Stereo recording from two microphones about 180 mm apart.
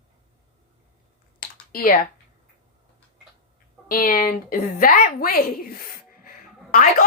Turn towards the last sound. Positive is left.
turn(degrees=45)  # may be behind; listen again after turning